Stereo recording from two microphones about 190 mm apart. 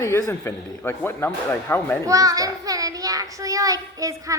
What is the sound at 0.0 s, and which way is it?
Speech, 15° left (ahead or behind).